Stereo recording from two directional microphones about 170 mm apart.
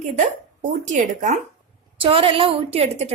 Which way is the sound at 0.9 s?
45° right (ahead or behind).